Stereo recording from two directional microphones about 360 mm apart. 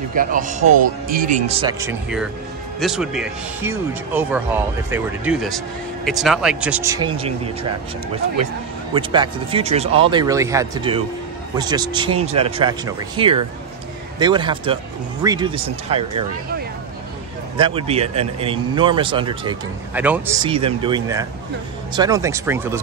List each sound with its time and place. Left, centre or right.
0.1 s speech: right
8.9 s speech: centre
17.6 s speech: centre